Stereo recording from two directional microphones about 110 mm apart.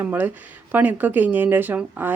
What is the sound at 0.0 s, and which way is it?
Speech, 15° right (ahead or behind).